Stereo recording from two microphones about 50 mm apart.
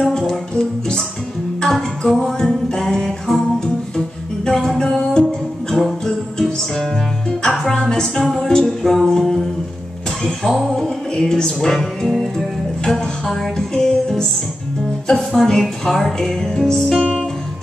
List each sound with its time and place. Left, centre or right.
1.6 s music: centre
4.5 s music: centre
9.0 s singing: centre
10.2 s music: centre